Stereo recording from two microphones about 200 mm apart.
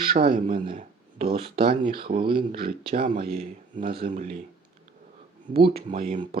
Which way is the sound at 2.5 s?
50° right (ahead or behind).